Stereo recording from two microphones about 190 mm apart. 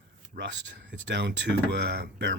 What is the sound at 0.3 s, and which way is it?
Speech, 70° right (ahead or behind).